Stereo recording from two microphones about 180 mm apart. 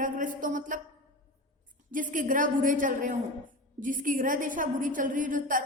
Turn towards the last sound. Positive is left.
turn(degrees=-50)  # may be behind; listen again after turning